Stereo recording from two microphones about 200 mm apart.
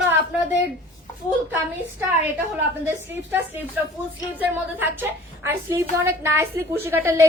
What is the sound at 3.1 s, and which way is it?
A woman's voice, 10° right (ahead or behind).